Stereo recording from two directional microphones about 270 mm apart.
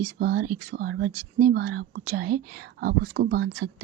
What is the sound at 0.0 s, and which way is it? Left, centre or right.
Speech, right.